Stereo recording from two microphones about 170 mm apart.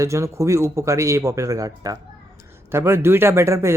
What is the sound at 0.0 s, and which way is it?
Speech, 15° right (ahead or behind).